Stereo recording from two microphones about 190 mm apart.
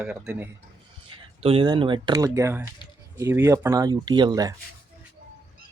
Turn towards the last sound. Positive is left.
turn(degrees=-20)  # may be behind; listen again after turning